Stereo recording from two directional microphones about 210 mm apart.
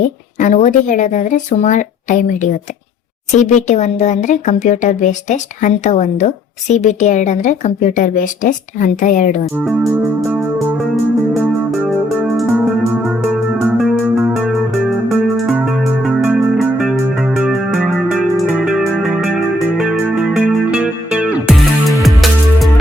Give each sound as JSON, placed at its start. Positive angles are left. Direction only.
{"t": 0.3, "sound": "speech", "side_deg": 35}
{"t": 9.6, "sound": "music", "side_deg": -5}